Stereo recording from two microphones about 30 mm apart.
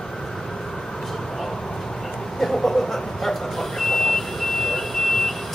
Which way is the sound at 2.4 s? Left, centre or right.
Centre.